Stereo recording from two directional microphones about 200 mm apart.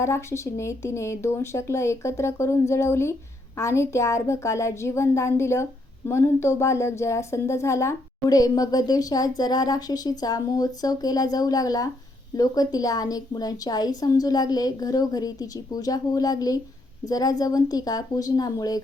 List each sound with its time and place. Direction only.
0.0 s speech: 15° left (ahead or behind)